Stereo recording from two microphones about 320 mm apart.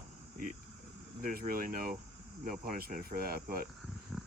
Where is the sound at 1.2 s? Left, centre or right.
Right.